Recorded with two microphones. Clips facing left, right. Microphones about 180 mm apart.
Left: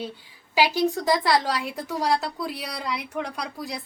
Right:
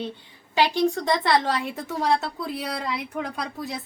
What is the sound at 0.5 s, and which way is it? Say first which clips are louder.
A woman's voice: right 1 dB; 5° left (ahead or behind).